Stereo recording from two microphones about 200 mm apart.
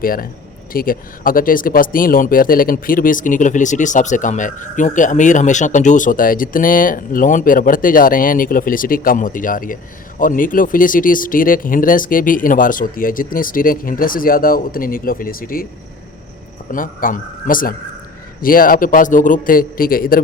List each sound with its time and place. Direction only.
0.0 s speech: 45° left (ahead or behind)
16.7 s speech: 45° left (ahead or behind)